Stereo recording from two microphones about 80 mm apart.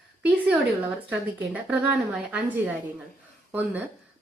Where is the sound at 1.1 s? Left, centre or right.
Centre.